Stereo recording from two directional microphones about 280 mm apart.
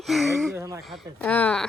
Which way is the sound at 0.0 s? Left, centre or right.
Centre.